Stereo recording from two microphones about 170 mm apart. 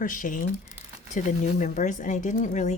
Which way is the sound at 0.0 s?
50° left (ahead or behind).